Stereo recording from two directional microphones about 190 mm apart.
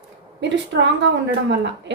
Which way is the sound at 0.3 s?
65° right (ahead or behind).